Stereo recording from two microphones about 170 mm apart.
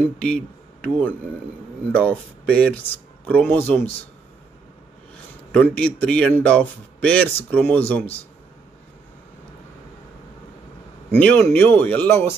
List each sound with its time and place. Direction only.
0.8 s speech: 10° left (ahead or behind)
5.1 s speech: 5° left (ahead or behind)
11.1 s speech: 10° left (ahead or behind)